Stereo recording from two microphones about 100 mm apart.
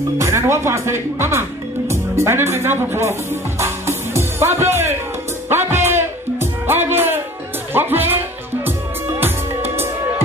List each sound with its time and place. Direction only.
0.2 s speech: 30° right (ahead or behind)
5.5 s music: 25° right (ahead or behind)
7.7 s speech: 20° right (ahead or behind)
9.2 s music: 20° right (ahead or behind)